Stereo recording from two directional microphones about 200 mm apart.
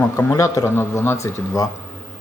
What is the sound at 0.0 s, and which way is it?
Speech, 10° left (ahead or behind).